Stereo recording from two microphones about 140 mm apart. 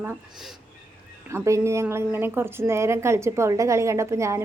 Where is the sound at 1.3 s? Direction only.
20° right (ahead or behind).